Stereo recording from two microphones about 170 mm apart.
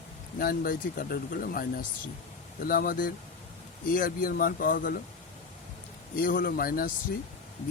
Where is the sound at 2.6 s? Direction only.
55° left (ahead or behind).